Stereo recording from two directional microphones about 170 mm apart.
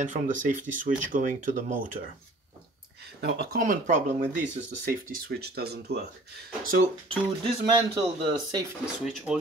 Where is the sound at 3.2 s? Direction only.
65° right (ahead or behind); by 4.0 s 45° right (ahead or behind).